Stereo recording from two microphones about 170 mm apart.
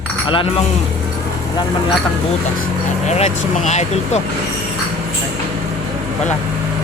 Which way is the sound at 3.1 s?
40° left (ahead or behind).